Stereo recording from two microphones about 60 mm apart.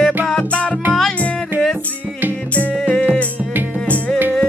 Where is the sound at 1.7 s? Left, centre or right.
Right.